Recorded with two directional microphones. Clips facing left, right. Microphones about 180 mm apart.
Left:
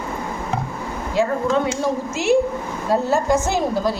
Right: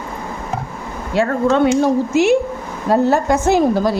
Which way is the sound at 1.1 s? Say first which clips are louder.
Right 4 dB; 75° right (ahead or behind).